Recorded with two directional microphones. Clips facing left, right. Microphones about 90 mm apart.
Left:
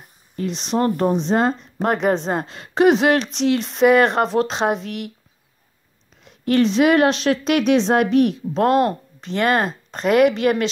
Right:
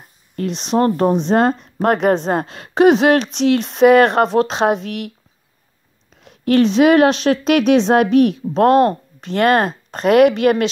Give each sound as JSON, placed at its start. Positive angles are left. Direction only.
{"t": 0.4, "sound": "speech", "side_deg": -45}
{"t": 6.2, "sound": "speech", "side_deg": -50}